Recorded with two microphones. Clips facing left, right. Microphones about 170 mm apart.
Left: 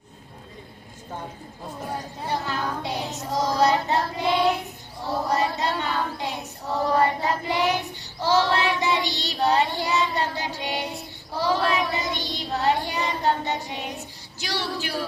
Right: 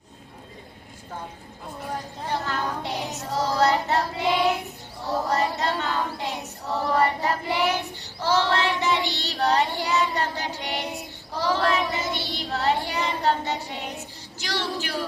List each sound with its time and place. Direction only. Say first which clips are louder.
2.2 s speech: even; 15° left (ahead or behind)
3.2 s child singing: left 1 dB; 15° left (ahead or behind)
4.2 s child singing: left 1 dB; 15° right (ahead or behind)
5.0 s child singing: even; 15° left (ahead or behind)